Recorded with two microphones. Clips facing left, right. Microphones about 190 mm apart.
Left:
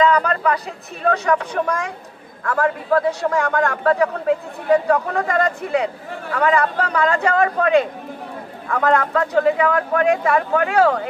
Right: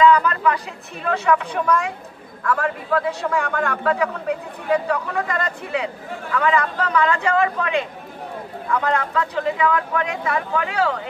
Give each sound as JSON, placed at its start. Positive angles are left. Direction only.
{"t": 0.0, "sound": "speech", "side_deg": 40}